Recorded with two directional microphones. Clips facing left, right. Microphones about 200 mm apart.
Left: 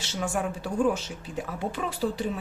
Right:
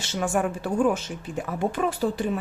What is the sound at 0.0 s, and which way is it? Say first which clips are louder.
Speech: right 4 dB; 55° right (ahead or behind).